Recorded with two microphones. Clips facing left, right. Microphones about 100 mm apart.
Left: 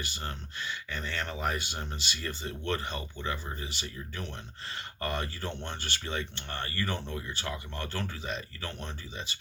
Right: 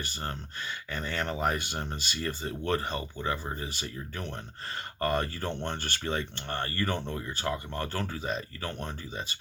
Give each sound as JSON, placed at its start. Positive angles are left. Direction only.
{"t": 0.0, "sound": "speech", "side_deg": -45}